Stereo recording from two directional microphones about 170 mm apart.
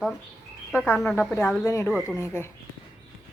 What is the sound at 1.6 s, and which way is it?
Speech, 15° left (ahead or behind).